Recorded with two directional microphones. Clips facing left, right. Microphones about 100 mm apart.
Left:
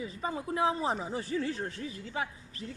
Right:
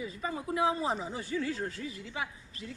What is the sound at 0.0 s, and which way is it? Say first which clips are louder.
A woman's voice: left 1 dB; 30° left (ahead or behind).